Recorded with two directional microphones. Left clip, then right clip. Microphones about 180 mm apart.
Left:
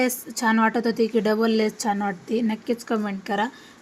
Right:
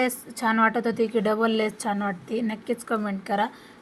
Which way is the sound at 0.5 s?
35° left (ahead or behind).